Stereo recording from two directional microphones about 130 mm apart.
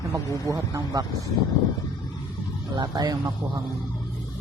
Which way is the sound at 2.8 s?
30° right (ahead or behind).